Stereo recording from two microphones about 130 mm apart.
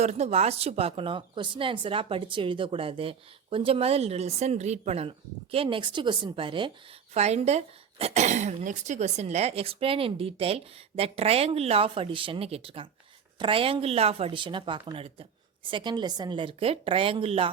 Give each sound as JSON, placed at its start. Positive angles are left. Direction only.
{"t": 0.0, "sound": "a woman's voice", "side_deg": -55}
{"t": 7.1, "sound": "a woman's voice", "side_deg": -55}